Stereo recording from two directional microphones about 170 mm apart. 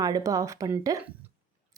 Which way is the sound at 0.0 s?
20° right (ahead or behind).